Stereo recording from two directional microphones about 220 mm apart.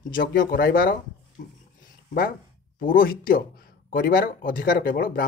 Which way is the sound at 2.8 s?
40° left (ahead or behind).